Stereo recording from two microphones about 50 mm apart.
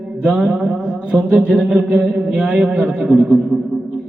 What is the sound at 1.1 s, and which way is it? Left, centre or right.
A man's voice, right.